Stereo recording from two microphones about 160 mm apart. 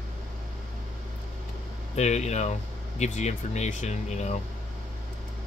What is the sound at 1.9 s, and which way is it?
Speech, 45° left (ahead or behind).